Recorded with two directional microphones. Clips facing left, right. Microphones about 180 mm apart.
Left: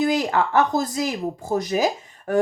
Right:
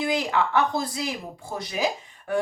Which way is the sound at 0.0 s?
45° left (ahead or behind).